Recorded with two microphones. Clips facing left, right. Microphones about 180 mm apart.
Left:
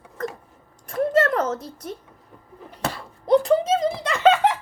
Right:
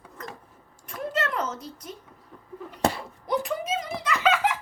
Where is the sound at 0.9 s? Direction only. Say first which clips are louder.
Left 9 dB; 55° left (ahead or behind).